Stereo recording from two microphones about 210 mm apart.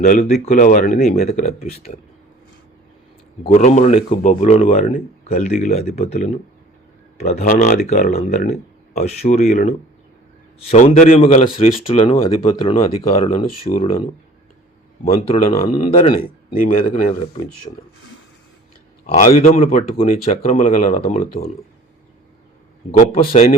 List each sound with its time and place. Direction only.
0.0 s speech: 35° left (ahead or behind)
3.5 s speech: 35° left (ahead or behind)
15.6 s speech: 30° left (ahead or behind)
16.5 s speech: 40° left (ahead or behind)
17.7 s speech: 25° left (ahead or behind)
19.1 s speech: 35° left (ahead or behind)
22.9 s speech: 30° left (ahead or behind)